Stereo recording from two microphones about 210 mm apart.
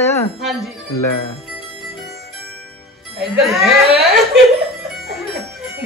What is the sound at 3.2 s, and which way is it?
Speech, centre (ahead or behind).